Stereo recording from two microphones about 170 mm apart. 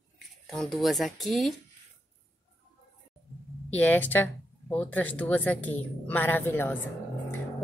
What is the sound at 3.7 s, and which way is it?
Speech, 10° left (ahead or behind).